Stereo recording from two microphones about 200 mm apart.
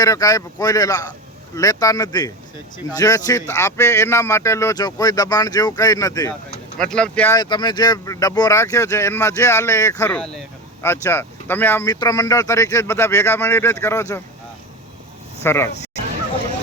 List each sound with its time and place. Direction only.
0.0 s speech: 20° left (ahead or behind)
6.9 s speech: 5° left (ahead or behind)
7.3 s speech: 20° left (ahead or behind)
10.2 s speech: 5° left (ahead or behind)
15.4 s speech: 10° left (ahead or behind)